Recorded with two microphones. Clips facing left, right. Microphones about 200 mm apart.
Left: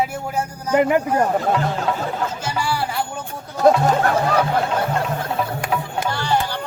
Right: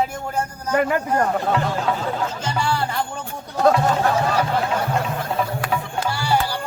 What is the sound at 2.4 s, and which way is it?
Music, 10° left (ahead or behind).